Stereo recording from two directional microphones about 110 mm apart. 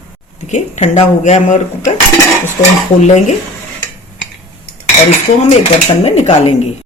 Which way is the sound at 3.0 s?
90° left.